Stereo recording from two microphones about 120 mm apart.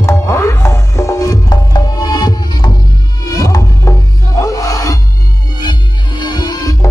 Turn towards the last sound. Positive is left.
turn(degrees=35)  # may be behind; listen again after turning